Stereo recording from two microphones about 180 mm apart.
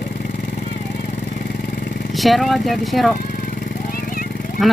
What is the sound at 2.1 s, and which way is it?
Speech, centre (ahead or behind).